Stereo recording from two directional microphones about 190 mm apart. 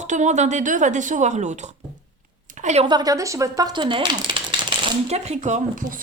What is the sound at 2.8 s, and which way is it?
Speech, 20° right (ahead or behind).